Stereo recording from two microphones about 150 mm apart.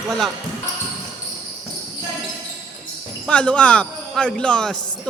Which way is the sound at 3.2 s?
10° left (ahead or behind).